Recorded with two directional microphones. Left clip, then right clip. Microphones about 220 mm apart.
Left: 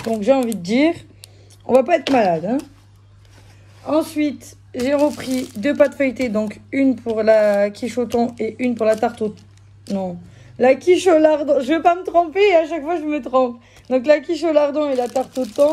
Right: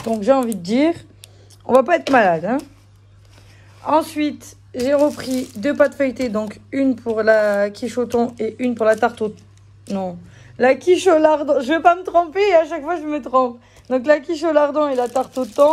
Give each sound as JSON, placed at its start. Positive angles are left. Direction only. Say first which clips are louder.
{"t": 0.0, "sound": "a woman's voice", "louder": "even", "side_deg": -20}
{"t": 3.8, "sound": "a woman's voice", "louder": "right 2 dB", "side_deg": -20}